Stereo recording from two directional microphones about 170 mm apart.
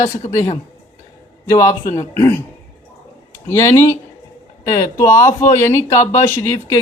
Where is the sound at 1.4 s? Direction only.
15° left (ahead or behind).